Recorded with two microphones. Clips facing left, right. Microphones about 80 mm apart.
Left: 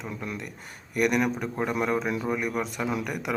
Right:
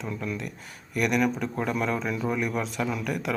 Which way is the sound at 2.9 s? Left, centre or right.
Centre.